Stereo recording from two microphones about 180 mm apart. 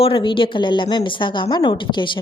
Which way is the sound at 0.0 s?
30° left (ahead or behind).